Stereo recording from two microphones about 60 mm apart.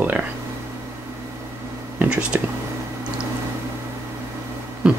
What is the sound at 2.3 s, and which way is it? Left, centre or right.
Speech, right.